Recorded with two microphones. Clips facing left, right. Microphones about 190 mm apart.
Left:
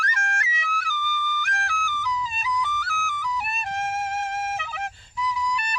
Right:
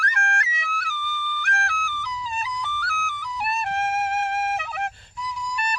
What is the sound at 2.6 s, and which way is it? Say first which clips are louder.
Music: left 1 dB; 60° right (ahead or behind).